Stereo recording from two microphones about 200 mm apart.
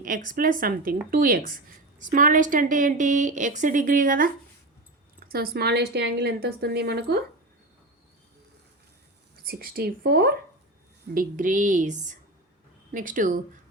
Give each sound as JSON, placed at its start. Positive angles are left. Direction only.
{"t": 0.3, "sound": "a woman's voice", "side_deg": -40}
{"t": 9.3, "sound": "a woman's voice", "side_deg": -50}